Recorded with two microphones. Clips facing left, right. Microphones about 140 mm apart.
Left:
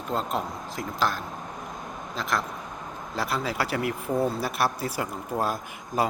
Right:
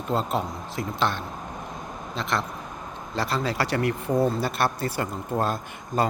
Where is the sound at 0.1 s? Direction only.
Centre (ahead or behind).